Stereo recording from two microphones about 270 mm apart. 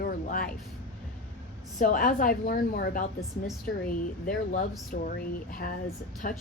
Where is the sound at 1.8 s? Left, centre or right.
Left.